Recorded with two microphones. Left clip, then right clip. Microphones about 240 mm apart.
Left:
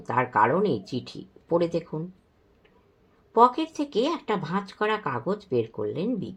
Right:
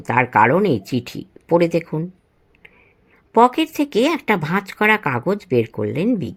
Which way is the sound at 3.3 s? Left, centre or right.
Right.